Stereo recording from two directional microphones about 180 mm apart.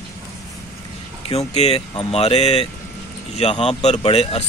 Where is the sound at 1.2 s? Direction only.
35° left (ahead or behind).